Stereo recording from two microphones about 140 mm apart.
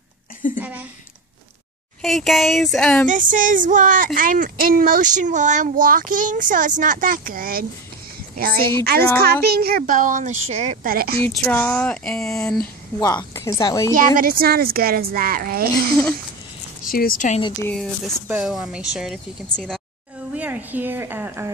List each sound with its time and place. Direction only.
0.6 s a woman's voice: 10° right (ahead or behind)
2.0 s speech: centre (ahead or behind)
3.1 s a woman's voice: 70° right (ahead or behind); by 10.9 s 55° right (ahead or behind)
10.9 s a woman's voice: 90° right
11.1 s speech: 15° left (ahead or behind)
13.0 s a woman's voice: 25° left (ahead or behind)
13.9 s a woman's voice: 85° right
16.8 s speech: 90° left
17.6 s speech: 5° left (ahead or behind)
20.3 s a woman's voice: 10° right (ahead or behind)